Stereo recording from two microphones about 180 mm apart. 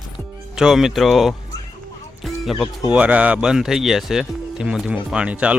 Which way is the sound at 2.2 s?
Centre (ahead or behind).